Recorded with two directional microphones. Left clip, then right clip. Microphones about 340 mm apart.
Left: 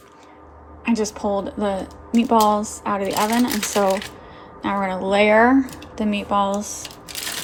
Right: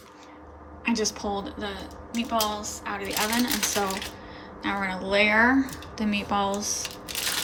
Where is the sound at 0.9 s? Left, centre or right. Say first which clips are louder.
Left 5 dB; centre.